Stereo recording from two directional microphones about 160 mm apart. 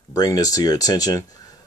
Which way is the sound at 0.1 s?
25° left (ahead or behind).